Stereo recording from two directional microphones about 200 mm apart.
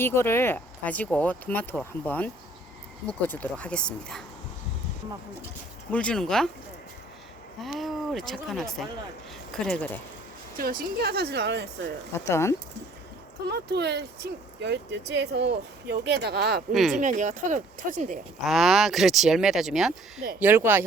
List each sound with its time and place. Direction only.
0.0 s speech: 10° left (ahead or behind)
5.9 s speech: 5° left (ahead or behind)
7.6 s speech: centre (ahead or behind)
10.6 s speech: 45° right (ahead or behind)
12.1 s speech: 15° left (ahead or behind)
13.5 s speech: 55° right (ahead or behind)
16.9 s speech: 40° right (ahead or behind)
18.4 s speech: centre (ahead or behind)